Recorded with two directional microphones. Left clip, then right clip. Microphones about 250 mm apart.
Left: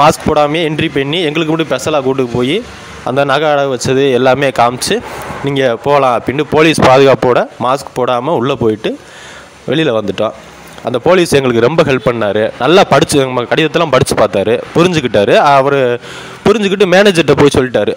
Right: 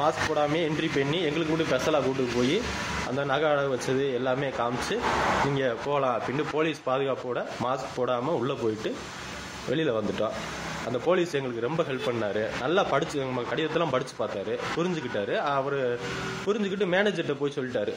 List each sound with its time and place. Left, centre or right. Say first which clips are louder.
0.0 s a man's voice: left 16 dB; left
3.2 s a man's voice: left 15 dB; left